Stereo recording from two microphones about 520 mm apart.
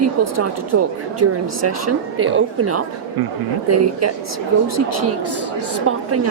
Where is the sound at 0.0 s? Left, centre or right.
Right.